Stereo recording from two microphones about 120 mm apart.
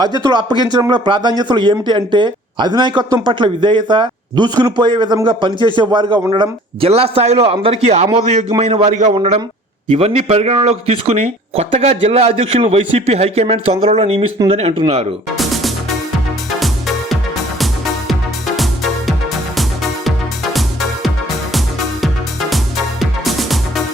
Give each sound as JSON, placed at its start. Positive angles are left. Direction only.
{"t": 0.2, "sound": "a man's voice", "side_deg": -35}
{"t": 8.5, "sound": "a man's voice", "side_deg": -50}
{"t": 15.4, "sound": "music", "side_deg": 0}
{"t": 18.1, "sound": "music", "side_deg": 0}